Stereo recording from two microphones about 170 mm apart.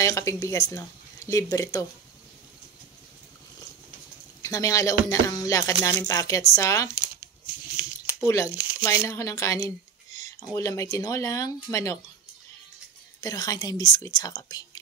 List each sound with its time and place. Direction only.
0.0 s speech: 15° left (ahead or behind)
4.4 s speech: 20° left (ahead or behind)
7.6 s a sound: 10° right (ahead or behind)
8.5 s speech: 10° right (ahead or behind)
8.8 s speech: 15° left (ahead or behind)
13.2 s speech: 20° left (ahead or behind)